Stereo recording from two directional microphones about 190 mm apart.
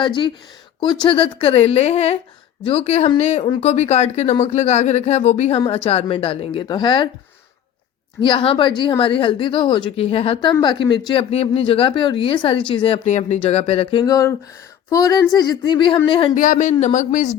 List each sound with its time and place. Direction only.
0.0 s a woman's voice: 25° left (ahead or behind)
8.2 s a woman's voice: 25° left (ahead or behind)
16.3 s a woman's voice: 45° left (ahead or behind)